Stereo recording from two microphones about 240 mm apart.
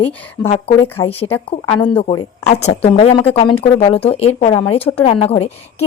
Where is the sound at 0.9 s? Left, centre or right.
Centre.